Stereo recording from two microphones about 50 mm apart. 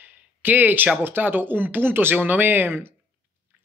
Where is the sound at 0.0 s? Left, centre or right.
Right.